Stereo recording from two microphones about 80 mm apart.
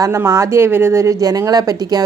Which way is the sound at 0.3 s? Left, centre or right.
Right.